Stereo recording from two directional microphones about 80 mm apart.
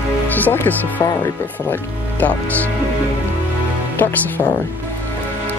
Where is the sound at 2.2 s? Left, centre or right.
Left.